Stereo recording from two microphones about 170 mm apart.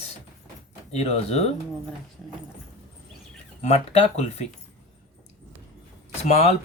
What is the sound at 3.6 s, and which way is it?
Speech, 40° left (ahead or behind).